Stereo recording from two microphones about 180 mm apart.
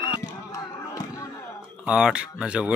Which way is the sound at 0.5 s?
15° left (ahead or behind).